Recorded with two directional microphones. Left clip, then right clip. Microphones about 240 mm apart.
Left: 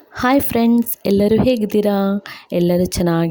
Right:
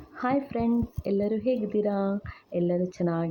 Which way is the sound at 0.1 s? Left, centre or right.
Left.